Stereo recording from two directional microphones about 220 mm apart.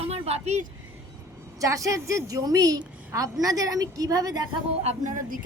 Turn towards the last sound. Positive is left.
turn(degrees=-35)  # may be behind; listen again after turning